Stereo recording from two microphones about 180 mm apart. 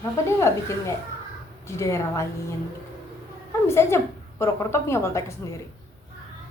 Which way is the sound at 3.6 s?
15° left (ahead or behind).